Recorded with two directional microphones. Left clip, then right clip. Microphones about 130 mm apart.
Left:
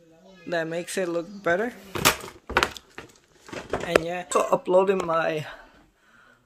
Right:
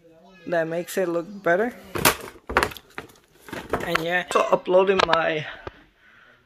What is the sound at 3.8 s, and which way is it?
Speech, centre (ahead or behind).